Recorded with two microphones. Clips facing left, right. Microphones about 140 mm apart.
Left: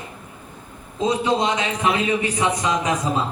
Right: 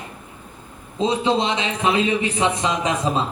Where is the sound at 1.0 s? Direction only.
25° right (ahead or behind).